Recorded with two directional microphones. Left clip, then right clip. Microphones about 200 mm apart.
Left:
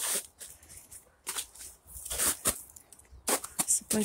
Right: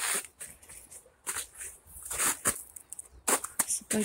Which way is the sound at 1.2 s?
Centre (ahead or behind).